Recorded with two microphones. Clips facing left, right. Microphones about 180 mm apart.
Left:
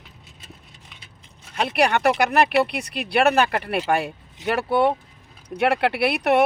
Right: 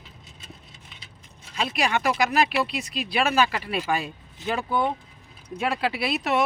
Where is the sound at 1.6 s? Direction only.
65° left (ahead or behind).